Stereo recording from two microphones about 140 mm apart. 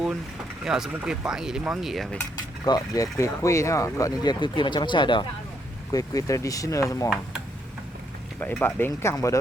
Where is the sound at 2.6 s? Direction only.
25° left (ahead or behind).